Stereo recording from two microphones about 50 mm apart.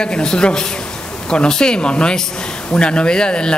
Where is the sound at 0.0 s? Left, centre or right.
Centre.